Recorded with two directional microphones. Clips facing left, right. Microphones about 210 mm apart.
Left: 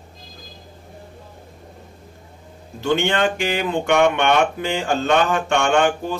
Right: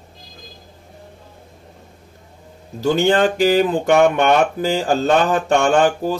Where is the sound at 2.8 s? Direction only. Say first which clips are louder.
Right 4 dB; 35° right (ahead or behind).